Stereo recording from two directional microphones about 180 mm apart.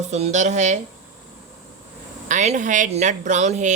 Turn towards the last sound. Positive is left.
turn(degrees=-40)  # may be behind; listen again after turning